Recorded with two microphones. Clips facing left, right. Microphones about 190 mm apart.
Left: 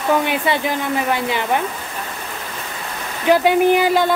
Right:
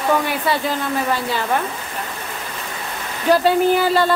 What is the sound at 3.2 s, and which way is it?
Speech, 15° left (ahead or behind).